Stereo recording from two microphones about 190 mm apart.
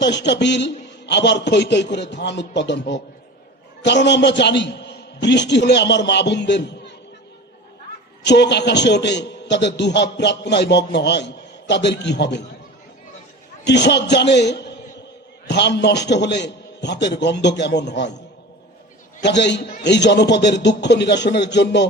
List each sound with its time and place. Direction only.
0.0 s a man's voice: 65° left (ahead or behind)
8.2 s a man's voice: 65° left (ahead or behind)
13.7 s a man's voice: 65° left (ahead or behind)
19.2 s a man's voice: 65° left (ahead or behind)